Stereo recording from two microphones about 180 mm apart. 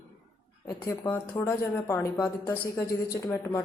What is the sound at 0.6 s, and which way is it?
Speech, 15° left (ahead or behind).